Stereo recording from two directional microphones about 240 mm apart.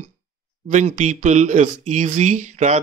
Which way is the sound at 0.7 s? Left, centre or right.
Right.